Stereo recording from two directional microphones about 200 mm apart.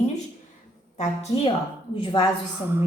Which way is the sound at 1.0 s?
30° left (ahead or behind).